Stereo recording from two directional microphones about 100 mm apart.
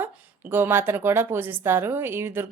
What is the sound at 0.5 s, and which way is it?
A woman's voice, 25° right (ahead or behind).